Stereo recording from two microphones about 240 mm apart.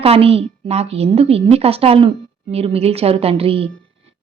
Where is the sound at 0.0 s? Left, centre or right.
Right.